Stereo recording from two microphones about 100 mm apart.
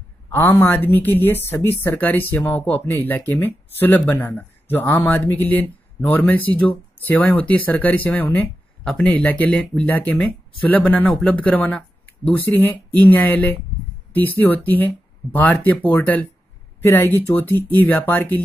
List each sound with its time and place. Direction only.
0.3 s speech: 20° left (ahead or behind)